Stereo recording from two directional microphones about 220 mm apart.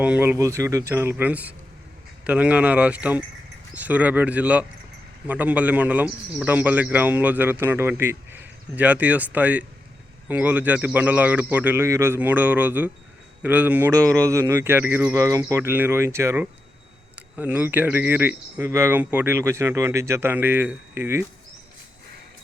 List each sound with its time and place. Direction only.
0.0 s speech: 5° right (ahead or behind)